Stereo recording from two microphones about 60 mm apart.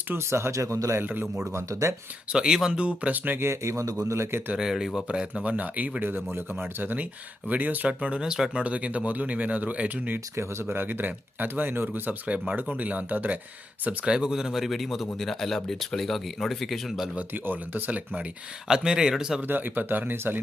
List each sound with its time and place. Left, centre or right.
0.1 s speech: right
1.0 s speech: right
1.5 s speech: right
2.3 s speech: centre
3.4 s speech: right
4.1 s speech: right
4.5 s speech: centre; by 10.2 s right
10.3 s speech: right
14.0 s speech: centre
17.2 s speech: right
18.7 s speech: centre
19.4 s speech: right